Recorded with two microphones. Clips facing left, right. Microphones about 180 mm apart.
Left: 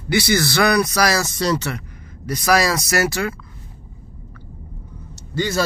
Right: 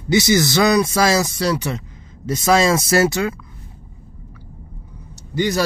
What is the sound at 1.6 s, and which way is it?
Speech, 25° right (ahead or behind).